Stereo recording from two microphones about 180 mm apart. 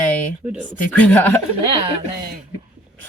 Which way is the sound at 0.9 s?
10° left (ahead or behind).